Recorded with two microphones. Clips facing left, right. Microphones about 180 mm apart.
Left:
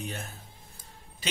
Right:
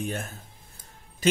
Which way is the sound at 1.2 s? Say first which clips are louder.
Right 11 dB; 45° right (ahead or behind).